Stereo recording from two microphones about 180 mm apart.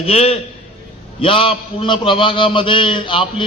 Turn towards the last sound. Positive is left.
turn(degrees=25)  # may be behind; listen again after turning